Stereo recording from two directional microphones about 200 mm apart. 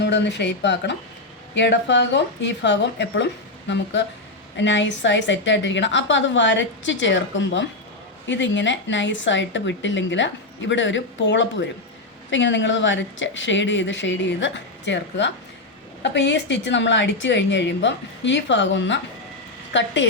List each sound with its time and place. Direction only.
0.0 s speech: 60° left (ahead or behind)